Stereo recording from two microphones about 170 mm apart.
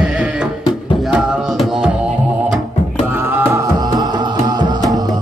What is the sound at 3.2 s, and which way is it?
Music, 15° right (ahead or behind).